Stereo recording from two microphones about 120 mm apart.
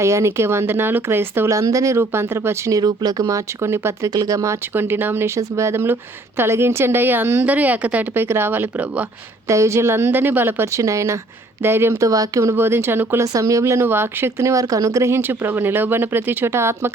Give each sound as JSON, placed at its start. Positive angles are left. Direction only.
{"t": 0.0, "sound": "speech", "side_deg": -25}
{"t": 9.5, "sound": "speech", "side_deg": -25}